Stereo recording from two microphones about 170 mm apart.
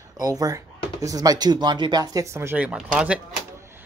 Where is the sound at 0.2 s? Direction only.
20° right (ahead or behind).